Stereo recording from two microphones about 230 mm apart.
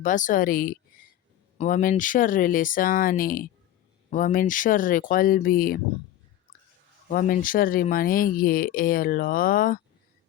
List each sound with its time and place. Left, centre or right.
0.0 s speech: left
7.1 s speech: left